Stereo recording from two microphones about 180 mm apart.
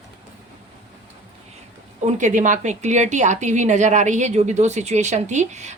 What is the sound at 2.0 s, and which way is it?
A woman's voice, 40° right (ahead or behind).